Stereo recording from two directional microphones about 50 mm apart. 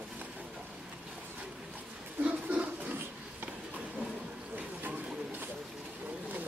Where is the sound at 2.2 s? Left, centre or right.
Right.